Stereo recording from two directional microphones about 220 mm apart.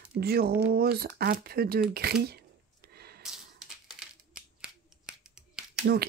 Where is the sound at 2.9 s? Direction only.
45° right (ahead or behind).